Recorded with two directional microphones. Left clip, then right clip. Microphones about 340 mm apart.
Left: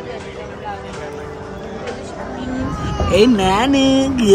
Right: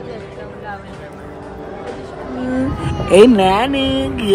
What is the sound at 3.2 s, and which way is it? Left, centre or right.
Speech, centre.